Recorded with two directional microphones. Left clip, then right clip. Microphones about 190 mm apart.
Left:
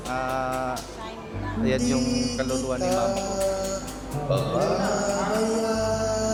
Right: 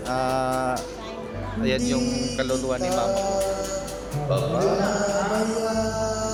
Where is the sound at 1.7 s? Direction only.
20° left (ahead or behind).